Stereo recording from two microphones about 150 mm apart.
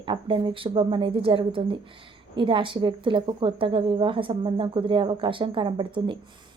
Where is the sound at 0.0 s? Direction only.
35° right (ahead or behind).